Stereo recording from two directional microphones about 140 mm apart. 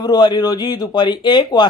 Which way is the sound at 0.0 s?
30° left (ahead or behind).